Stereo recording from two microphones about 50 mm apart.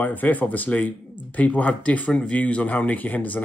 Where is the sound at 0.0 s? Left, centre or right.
Left.